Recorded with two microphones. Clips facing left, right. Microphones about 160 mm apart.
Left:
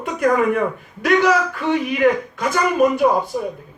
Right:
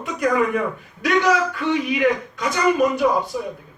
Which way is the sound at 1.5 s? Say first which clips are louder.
Left 1 dB; 45° left (ahead or behind).